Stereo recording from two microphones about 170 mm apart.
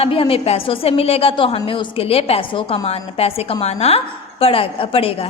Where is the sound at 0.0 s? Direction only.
35° left (ahead or behind).